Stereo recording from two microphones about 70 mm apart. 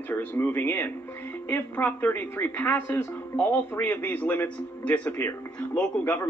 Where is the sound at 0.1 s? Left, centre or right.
Left.